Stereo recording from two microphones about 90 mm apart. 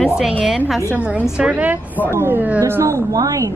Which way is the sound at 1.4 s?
15° right (ahead or behind).